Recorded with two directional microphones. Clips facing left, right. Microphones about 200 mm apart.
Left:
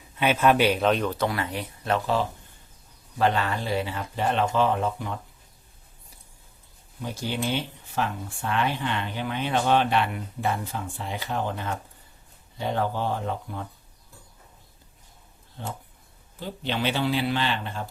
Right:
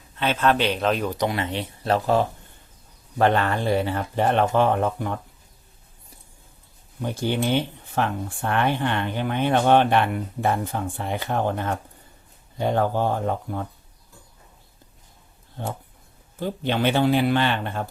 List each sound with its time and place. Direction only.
0.2 s speech: 10° left (ahead or behind)
1.1 s speech: 20° right (ahead or behind)
3.2 s speech: 55° right (ahead or behind)
7.0 s speech: 55° right (ahead or behind)
15.6 s speech: 50° right (ahead or behind)